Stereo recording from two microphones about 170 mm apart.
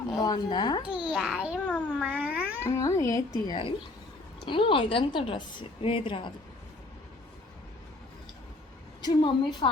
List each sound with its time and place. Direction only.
0.2 s a woman's voice: 25° left (ahead or behind)
0.9 s a child's voice: 5° right (ahead or behind)
1.6 s a child's voice: 10° left (ahead or behind)
2.0 s cat: 10° right (ahead or behind)
2.6 s a woman's voice: 20° left (ahead or behind)
9.0 s a woman's voice: 25° left (ahead or behind)